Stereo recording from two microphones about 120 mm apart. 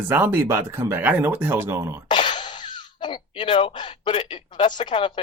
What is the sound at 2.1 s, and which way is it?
Speech, 45° left (ahead or behind).